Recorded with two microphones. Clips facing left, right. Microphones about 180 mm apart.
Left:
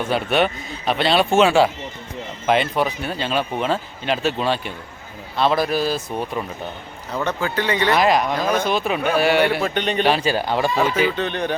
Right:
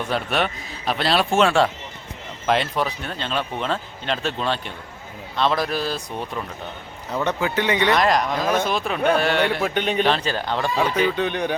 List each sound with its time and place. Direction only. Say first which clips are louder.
0.0 s speech: left 4 dB; centre (ahead or behind)
7.4 s speech: even; 20° right (ahead or behind)
7.9 s speech: left 4 dB; 5° left (ahead or behind)
9.6 s speech: left 1 dB; 5° right (ahead or behind)
10.0 s speech: left 5 dB; 10° left (ahead or behind)
11.2 s speech: even; 10° right (ahead or behind)